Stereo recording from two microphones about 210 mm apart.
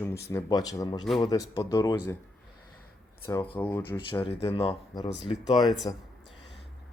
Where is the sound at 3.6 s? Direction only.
10° left (ahead or behind).